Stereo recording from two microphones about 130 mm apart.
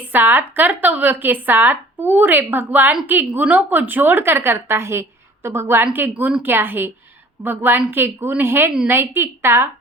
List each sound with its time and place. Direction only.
0.1 s speech: 15° right (ahead or behind)